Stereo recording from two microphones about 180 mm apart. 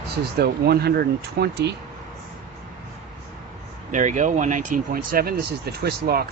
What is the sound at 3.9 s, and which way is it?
Speech, 45° right (ahead or behind).